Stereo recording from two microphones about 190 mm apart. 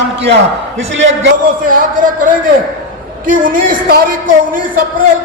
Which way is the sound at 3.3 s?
45° right (ahead or behind).